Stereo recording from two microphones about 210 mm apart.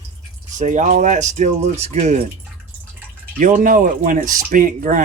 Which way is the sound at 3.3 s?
40° right (ahead or behind).